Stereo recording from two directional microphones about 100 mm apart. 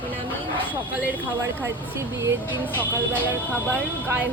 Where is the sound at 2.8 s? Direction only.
20° left (ahead or behind).